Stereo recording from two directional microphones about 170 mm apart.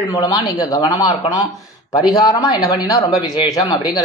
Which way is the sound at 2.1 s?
20° left (ahead or behind).